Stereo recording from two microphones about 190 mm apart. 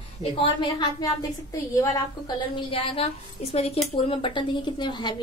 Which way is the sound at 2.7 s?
30° left (ahead or behind).